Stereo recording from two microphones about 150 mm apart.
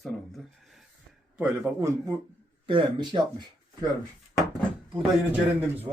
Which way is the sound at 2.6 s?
30° right (ahead or behind).